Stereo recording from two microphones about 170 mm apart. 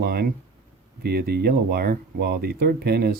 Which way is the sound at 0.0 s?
65° right (ahead or behind).